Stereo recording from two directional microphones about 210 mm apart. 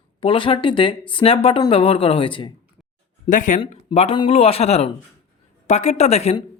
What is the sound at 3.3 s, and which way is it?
Speech, 40° left (ahead or behind).